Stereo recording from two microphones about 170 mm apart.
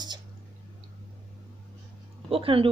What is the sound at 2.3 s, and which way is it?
Speech, 30° right (ahead or behind).